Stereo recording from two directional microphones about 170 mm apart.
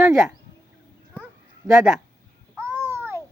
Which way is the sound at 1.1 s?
5° right (ahead or behind).